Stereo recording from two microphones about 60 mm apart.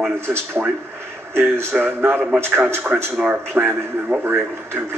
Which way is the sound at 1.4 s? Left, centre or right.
Right.